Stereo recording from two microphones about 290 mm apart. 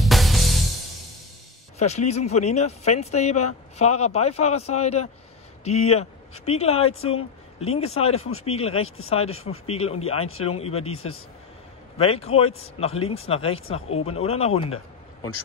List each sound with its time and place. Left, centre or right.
0.0 s music: centre
1.8 s speech: left
8.3 s a man's voice: left
8.5 s speech: left
8.8 s a man's voice: left
9.7 s speech: left
10.9 s a man's voice: left
12.0 s speech: centre